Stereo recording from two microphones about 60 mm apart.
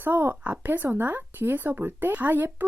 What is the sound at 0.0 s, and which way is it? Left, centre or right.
Speech, right.